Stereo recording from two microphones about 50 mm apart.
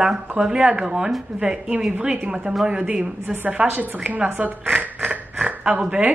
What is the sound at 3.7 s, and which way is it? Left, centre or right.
Speech, right.